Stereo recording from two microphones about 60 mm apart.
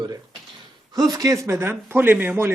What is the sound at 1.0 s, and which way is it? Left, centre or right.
Speech, right.